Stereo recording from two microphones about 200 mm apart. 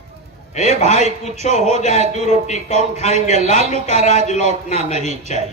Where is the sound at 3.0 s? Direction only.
35° left (ahead or behind).